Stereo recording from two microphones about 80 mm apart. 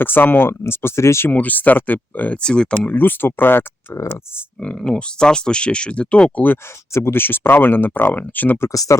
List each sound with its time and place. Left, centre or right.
0.0 s speech: left
1.3 s speech: left
2.4 s speech: centre; by 4.0 s left
4.6 s speech: centre; by 8.7 s left
8.7 s speech: left